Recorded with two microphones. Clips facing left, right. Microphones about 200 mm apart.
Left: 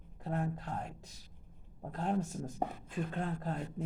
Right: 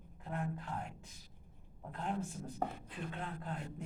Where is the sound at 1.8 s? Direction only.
40° left (ahead or behind).